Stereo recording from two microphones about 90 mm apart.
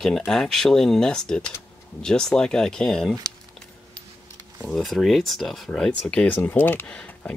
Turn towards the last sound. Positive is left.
turn(degrees=15)  # may be behind; listen again after turning